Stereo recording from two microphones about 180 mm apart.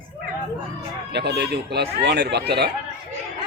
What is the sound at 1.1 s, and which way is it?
Speech, 65° right (ahead or behind).